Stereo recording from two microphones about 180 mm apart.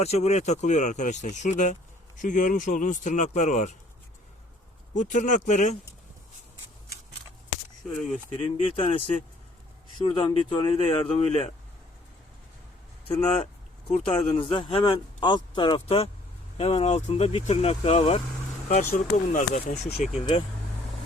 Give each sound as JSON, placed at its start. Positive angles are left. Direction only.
{"t": 0.0, "sound": "speech", "side_deg": 35}
{"t": 4.9, "sound": "speech", "side_deg": 45}
{"t": 8.4, "sound": "speech", "side_deg": 30}
{"t": 10.0, "sound": "speech", "side_deg": 25}
{"t": 13.1, "sound": "speech", "side_deg": 35}